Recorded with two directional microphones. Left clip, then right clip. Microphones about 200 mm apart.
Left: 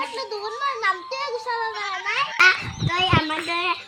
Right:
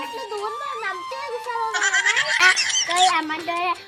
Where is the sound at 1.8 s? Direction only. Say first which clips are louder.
Right 5 dB; 55° right (ahead or behind).